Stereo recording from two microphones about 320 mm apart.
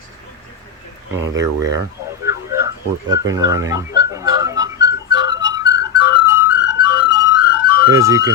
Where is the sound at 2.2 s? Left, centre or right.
Centre.